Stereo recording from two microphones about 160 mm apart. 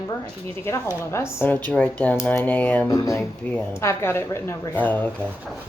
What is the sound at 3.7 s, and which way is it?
A woman's voice, 15° left (ahead or behind).